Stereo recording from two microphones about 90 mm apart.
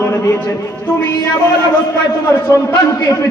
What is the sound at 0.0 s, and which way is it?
Speech, 30° left (ahead or behind).